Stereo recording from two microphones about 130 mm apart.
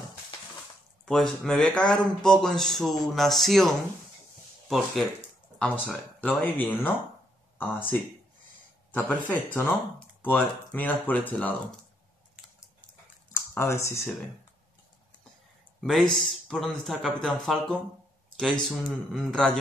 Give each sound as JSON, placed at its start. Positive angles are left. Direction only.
{"t": 1.0, "sound": "speech", "side_deg": 5}
{"t": 13.3, "sound": "speech", "side_deg": 20}
{"t": 15.8, "sound": "speech", "side_deg": 0}